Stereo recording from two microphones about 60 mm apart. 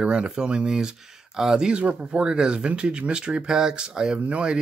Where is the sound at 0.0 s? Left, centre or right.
Centre.